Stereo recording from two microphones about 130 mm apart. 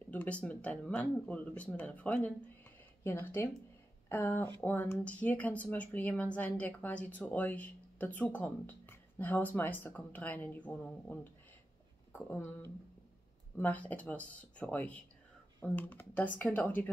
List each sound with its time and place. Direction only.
0.1 s speech: 10° left (ahead or behind)